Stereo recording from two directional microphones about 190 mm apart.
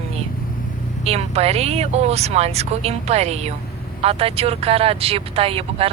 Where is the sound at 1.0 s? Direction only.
35° right (ahead or behind).